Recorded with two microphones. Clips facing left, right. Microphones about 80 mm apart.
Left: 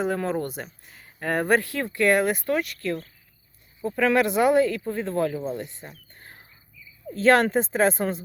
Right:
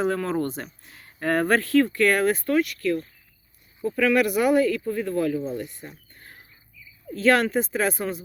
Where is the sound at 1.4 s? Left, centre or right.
Centre.